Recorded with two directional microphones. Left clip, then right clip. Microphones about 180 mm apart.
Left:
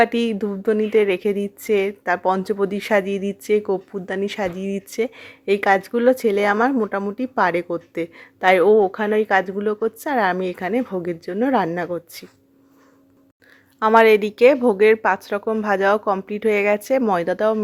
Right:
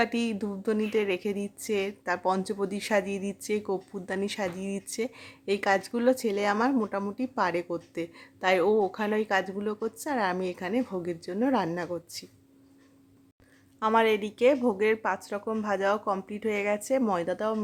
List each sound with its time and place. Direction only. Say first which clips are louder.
0.0 s a woman's voice: left 10 dB; 15° left (ahead or behind)
13.7 s a woman's voice: left 11 dB; 25° left (ahead or behind)